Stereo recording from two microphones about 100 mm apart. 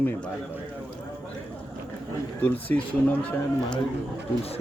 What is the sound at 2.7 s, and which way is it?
Speech, 15° left (ahead or behind).